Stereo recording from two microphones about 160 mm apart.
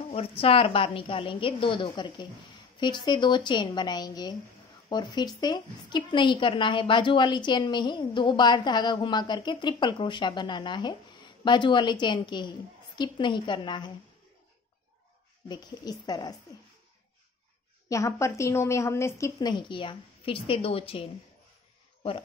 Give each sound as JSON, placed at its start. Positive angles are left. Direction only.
{"t": 0.1, "sound": "a woman's voice", "side_deg": 40}
{"t": 15.4, "sound": "a woman's voice", "side_deg": 25}
{"t": 17.8, "sound": "a woman's voice", "side_deg": 20}